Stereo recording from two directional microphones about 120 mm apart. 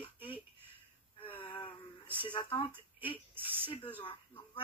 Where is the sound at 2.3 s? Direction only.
40° left (ahead or behind).